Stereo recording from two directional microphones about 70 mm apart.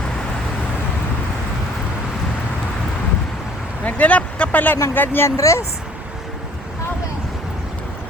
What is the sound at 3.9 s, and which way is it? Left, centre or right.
Speech, left.